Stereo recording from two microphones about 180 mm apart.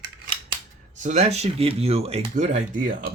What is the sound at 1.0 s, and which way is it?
Speech, 40° right (ahead or behind).